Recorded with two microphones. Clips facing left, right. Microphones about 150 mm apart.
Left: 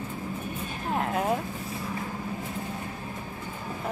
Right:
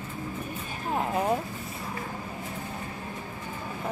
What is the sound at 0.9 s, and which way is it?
Vehicle, centre (ahead or behind).